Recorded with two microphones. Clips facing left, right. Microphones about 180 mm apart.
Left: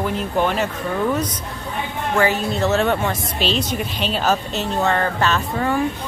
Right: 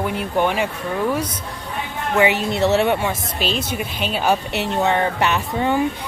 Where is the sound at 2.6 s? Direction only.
15° right (ahead or behind).